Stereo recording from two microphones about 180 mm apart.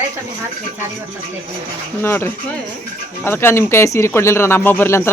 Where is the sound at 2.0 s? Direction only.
10° left (ahead or behind).